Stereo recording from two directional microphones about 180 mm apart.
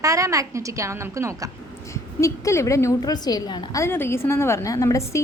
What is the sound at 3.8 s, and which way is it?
A woman's voice, 15° left (ahead or behind).